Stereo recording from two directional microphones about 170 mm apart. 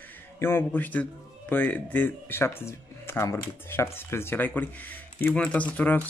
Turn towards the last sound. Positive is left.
turn(degrees=10)  # may be behind; listen again after turning